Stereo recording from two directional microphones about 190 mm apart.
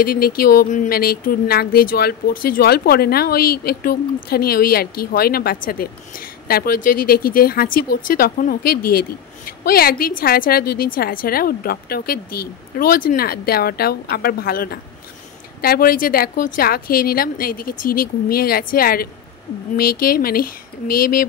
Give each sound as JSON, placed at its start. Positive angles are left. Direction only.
{"t": 0.0, "sound": "speech", "side_deg": 50}